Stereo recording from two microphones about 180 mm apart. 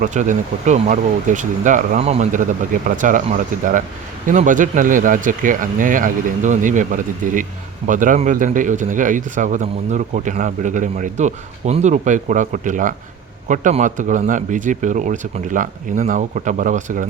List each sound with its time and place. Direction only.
0.0 s speech: 45° right (ahead or behind)